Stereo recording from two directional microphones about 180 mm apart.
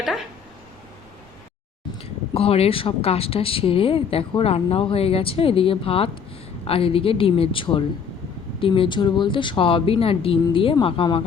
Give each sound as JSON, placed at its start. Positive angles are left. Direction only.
{"t": 2.0, "sound": "speech", "side_deg": 30}